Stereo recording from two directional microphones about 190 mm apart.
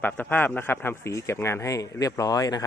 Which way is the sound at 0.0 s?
10° left (ahead or behind).